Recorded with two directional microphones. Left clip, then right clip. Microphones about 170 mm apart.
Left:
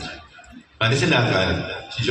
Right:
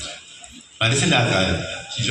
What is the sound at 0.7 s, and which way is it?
Speech, 30° left (ahead or behind).